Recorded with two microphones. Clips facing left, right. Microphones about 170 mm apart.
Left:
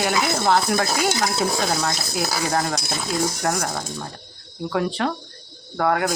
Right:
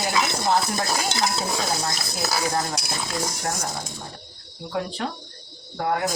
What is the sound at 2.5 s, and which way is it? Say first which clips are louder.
Speech: left 5 dB; 75° left (ahead or behind).